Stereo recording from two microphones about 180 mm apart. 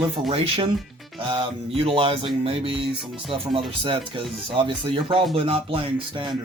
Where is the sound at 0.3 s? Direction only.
30° right (ahead or behind).